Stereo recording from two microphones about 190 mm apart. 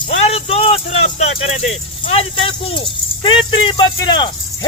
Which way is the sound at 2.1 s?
30° left (ahead or behind).